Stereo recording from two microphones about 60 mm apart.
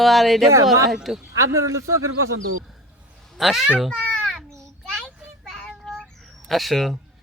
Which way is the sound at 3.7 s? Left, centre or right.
Centre.